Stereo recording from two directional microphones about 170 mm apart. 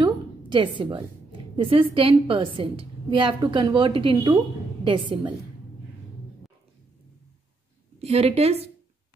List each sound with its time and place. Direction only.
0.0 s a sound: 30° right (ahead or behind)
1.6 s a woman's voice: 30° right (ahead or behind)
8.0 s a woman's voice: 35° right (ahead or behind)